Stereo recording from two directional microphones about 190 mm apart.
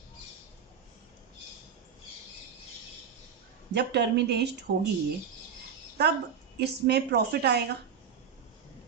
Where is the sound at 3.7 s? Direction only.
60° right (ahead or behind).